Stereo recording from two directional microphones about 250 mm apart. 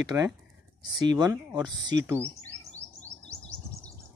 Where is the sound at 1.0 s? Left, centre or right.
Centre.